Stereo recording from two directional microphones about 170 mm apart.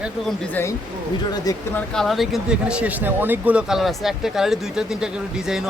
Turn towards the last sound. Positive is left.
turn(degrees=-5)  # may be behind; listen again after turning